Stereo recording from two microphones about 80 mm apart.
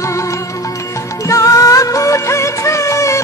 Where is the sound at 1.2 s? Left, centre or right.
Left.